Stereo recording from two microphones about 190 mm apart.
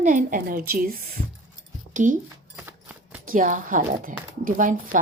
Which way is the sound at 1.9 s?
40° right (ahead or behind).